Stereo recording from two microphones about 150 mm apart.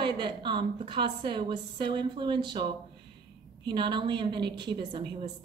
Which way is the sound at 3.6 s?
30° right (ahead or behind).